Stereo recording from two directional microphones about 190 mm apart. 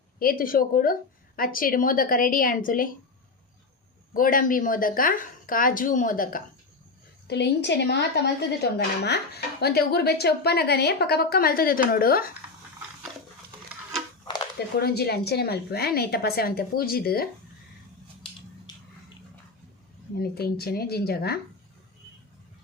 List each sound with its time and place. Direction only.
0.2 s speech: 50° left (ahead or behind)
4.1 s speech: 45° left (ahead or behind)
7.3 s a woman's voice: 60° left (ahead or behind)
14.8 s a woman's voice: 55° left (ahead or behind)
20.1 s a woman's voice: 55° left (ahead or behind)